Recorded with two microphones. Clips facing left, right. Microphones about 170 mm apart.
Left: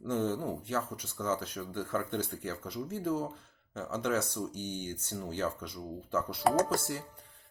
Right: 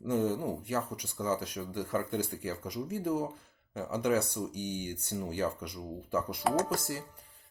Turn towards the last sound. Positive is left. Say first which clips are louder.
# left 2 dB
turn(degrees=45)  # may be behind; listen again after turning